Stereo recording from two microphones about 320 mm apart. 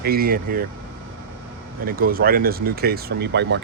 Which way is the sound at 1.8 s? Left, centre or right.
Right.